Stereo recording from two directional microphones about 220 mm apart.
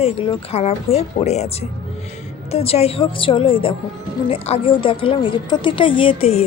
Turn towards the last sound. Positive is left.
turn(degrees=25)  # may be behind; listen again after turning